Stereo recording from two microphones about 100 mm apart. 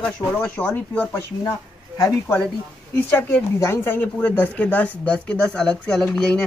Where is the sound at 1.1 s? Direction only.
35° left (ahead or behind).